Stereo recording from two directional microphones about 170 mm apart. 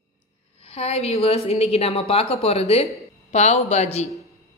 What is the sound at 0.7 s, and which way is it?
A woman's voice, 35° left (ahead or behind).